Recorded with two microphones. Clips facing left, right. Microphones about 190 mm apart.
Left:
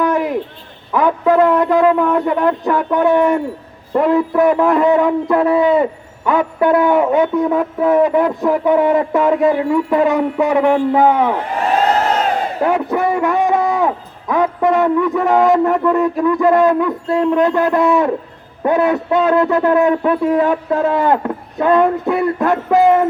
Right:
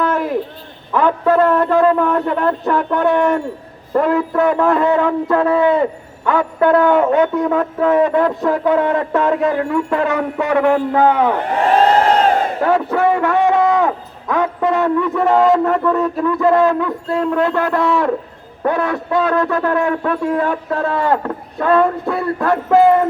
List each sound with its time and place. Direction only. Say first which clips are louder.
0.0 s owl: left 2 dB; 15° left (ahead or behind)
0.9 s speech: left 1 dB; 10° left (ahead or behind)
12.6 s a man's voice: even; 15° left (ahead or behind)